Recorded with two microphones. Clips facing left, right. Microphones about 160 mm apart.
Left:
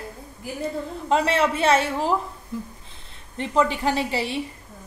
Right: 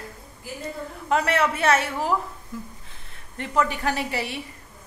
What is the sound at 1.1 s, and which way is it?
A woman's voice, 25° left (ahead or behind).